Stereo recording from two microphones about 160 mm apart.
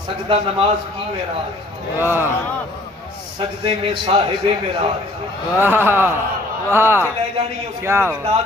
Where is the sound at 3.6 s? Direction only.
35° right (ahead or behind).